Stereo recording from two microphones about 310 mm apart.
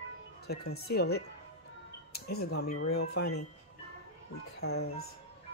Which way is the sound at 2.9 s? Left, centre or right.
Left.